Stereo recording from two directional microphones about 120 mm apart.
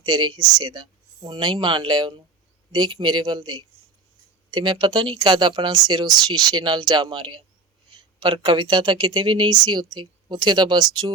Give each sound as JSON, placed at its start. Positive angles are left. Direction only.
{"t": 0.0, "sound": "speech", "side_deg": -35}